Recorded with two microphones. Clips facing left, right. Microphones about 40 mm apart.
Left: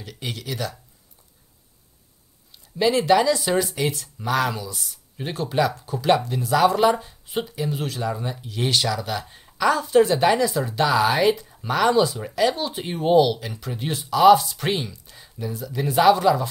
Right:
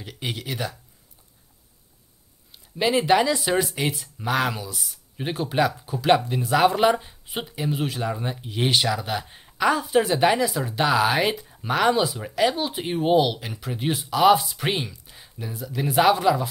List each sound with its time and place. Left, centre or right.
0.0 s speech: centre
2.5 s speech: centre
7.2 s speech: centre